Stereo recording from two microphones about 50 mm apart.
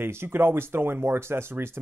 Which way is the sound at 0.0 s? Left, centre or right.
Right.